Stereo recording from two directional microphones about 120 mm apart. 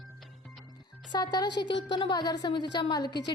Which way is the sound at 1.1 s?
35° left (ahead or behind).